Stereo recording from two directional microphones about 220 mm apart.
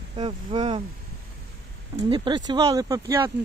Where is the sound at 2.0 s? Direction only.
20° right (ahead or behind).